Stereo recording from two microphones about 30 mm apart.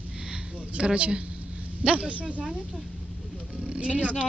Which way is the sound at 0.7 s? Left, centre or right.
Right.